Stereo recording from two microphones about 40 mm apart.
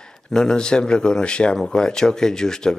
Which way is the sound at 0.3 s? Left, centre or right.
Centre.